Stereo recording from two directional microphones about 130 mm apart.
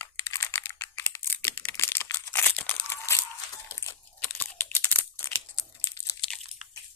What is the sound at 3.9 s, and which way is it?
Crunch, 15° left (ahead or behind).